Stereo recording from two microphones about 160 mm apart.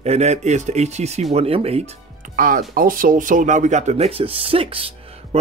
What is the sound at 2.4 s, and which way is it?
Speech, 60° right (ahead or behind).